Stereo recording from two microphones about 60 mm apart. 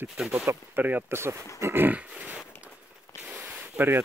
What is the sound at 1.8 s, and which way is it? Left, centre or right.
Grunt, right.